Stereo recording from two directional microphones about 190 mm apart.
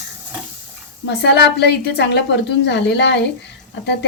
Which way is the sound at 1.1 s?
60° left (ahead or behind).